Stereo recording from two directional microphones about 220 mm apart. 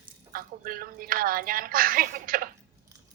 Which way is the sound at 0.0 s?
40° right (ahead or behind).